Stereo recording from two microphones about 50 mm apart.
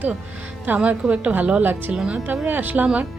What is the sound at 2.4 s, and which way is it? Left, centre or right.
Speech, right.